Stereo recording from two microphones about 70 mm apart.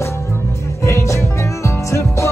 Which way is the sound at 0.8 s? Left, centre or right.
Left.